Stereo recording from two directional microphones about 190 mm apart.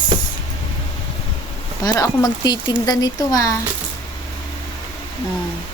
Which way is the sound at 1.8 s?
20° left (ahead or behind).